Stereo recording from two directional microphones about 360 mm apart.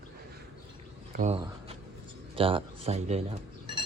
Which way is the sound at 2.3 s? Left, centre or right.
Centre.